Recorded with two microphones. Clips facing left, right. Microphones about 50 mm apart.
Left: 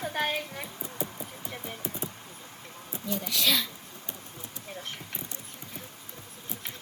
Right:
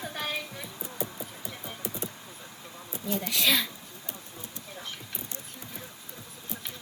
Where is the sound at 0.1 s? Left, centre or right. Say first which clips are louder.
Left 4 dB; left.